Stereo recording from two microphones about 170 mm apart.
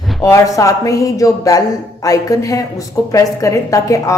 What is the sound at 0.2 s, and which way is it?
A woman's voice, 20° left (ahead or behind).